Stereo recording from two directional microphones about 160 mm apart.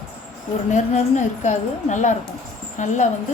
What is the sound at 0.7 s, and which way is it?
A woman's voice, 50° left (ahead or behind).